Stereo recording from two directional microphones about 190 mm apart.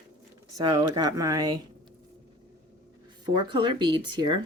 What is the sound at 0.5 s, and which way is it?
Speech, 20° right (ahead or behind).